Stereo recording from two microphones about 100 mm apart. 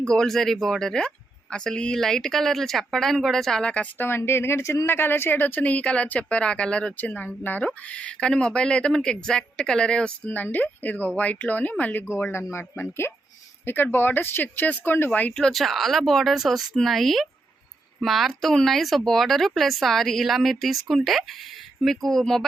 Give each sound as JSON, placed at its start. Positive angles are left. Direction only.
{"t": 0.1, "sound": "speech", "side_deg": 5}